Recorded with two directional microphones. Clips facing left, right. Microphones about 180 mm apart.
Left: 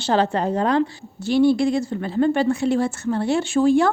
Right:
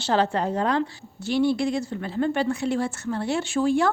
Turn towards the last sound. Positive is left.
turn(degrees=30)  # may be behind; listen again after turning